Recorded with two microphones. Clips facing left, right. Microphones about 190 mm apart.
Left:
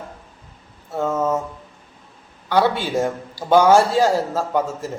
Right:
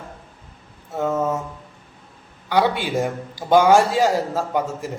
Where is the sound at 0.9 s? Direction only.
15° right (ahead or behind).